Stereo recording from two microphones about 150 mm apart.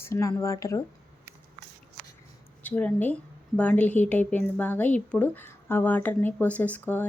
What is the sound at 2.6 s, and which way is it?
Speech, 10° left (ahead or behind).